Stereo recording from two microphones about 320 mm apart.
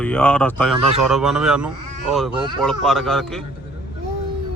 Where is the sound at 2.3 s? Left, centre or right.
Centre.